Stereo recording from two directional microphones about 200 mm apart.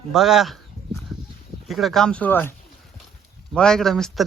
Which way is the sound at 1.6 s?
Centre (ahead or behind).